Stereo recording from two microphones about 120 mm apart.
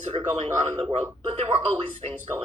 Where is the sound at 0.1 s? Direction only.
55° right (ahead or behind).